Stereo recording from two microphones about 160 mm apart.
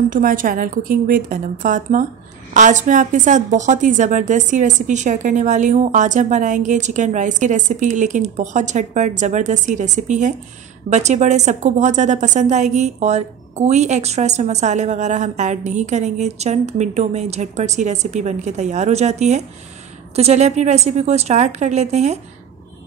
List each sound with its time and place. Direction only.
0.1 s a woman's voice: 60° right (ahead or behind)